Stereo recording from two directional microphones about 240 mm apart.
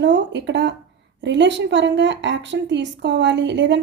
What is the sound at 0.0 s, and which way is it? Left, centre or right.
A woman's voice, right.